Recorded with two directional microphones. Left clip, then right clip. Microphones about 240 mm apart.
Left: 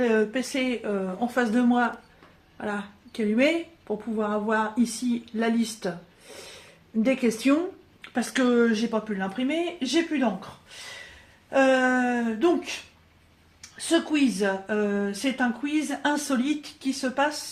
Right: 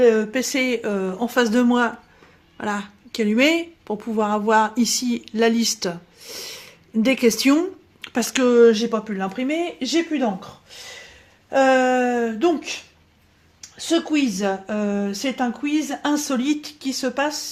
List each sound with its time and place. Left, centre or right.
0.0 s speech: right
7.0 s speech: right
11.4 s speech: right